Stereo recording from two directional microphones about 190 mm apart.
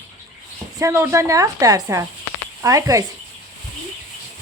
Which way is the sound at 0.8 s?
15° right (ahead or behind).